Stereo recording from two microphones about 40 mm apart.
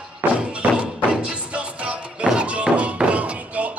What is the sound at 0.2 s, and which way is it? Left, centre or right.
Music, right.